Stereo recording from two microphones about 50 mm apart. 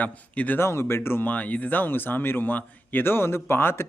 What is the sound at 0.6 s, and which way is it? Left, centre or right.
Speech, left.